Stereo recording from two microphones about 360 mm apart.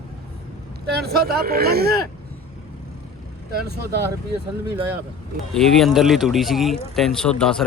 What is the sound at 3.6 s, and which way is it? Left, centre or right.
Speech, right.